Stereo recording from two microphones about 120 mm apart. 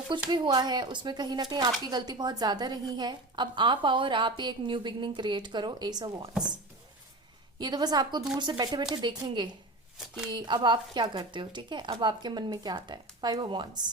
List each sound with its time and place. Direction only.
0.1 s a woman's voice: 40° right (ahead or behind)
7.6 s a woman's voice: 35° right (ahead or behind)